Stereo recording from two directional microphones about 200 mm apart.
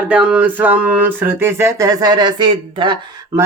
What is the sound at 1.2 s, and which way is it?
Speech, 10° right (ahead or behind).